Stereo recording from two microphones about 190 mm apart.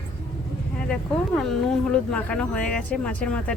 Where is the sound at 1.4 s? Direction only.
Centre (ahead or behind).